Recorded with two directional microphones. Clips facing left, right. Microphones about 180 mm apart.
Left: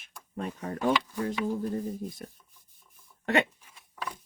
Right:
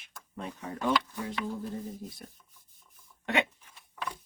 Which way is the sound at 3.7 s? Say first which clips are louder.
Even; centre (ahead or behind).